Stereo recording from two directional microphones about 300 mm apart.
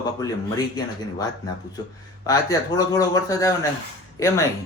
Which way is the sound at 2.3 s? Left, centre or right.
Centre.